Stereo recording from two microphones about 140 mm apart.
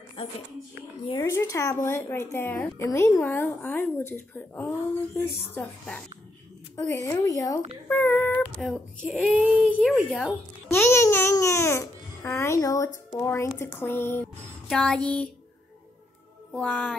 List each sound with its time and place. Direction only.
0.2 s speech: 40° left (ahead or behind)
1.2 s a woman's voice: 20° left (ahead or behind)
6.8 s speech: 25° left (ahead or behind)
7.9 s a sound: 15° left (ahead or behind)
8.5 s speech: 5° right (ahead or behind)
9.3 s child singing: 10° right (ahead or behind)
9.8 s speech: 5° left (ahead or behind)
10.7 s a woman's voice: 15° left (ahead or behind)
16.5 s a woman's voice: 10° left (ahead or behind)